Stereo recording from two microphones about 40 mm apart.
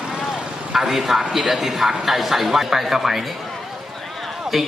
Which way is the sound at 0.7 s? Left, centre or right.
Centre.